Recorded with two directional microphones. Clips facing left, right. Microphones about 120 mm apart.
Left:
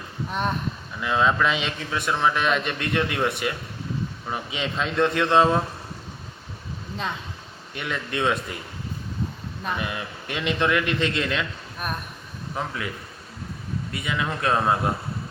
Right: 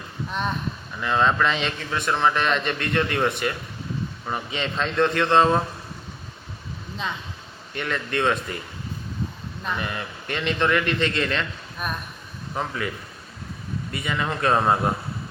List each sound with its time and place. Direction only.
0.3 s a man's voice: 5° left (ahead or behind)
6.9 s a man's voice: centre (ahead or behind)
9.6 s a man's voice: 5° left (ahead or behind)
13.9 s a man's voice: centre (ahead or behind)